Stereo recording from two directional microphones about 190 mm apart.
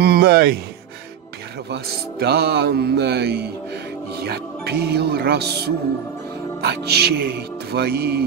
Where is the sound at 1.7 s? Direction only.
60° right (ahead or behind).